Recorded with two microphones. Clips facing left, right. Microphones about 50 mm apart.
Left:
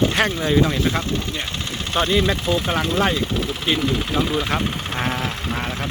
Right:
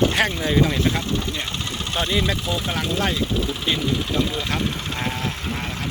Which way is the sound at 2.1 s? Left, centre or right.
Centre.